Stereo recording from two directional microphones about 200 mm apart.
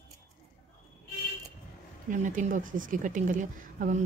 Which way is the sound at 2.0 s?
40° right (ahead or behind).